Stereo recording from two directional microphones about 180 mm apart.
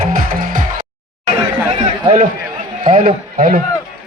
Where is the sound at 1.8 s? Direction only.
35° right (ahead or behind).